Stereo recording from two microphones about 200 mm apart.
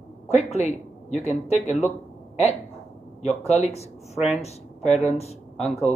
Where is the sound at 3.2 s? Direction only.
30° left (ahead or behind).